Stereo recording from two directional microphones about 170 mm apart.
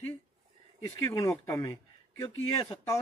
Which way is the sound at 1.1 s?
15° left (ahead or behind).